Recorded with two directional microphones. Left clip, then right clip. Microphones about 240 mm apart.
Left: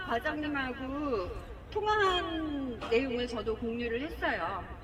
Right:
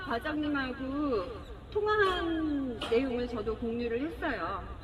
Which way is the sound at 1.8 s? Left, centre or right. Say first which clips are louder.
Right 1 dB; centre.